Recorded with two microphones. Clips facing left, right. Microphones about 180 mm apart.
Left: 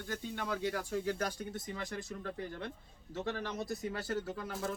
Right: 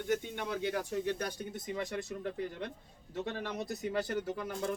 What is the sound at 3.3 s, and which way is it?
Speech, 20° right (ahead or behind).